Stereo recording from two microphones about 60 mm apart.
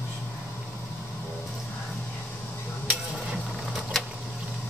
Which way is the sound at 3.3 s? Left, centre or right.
Centre.